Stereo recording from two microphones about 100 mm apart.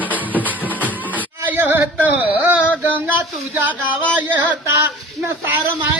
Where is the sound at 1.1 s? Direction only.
20° right (ahead or behind).